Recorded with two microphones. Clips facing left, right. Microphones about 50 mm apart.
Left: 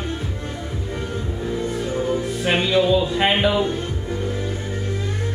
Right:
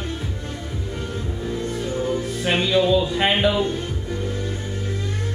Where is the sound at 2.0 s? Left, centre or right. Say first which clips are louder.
Left 1 dB; centre.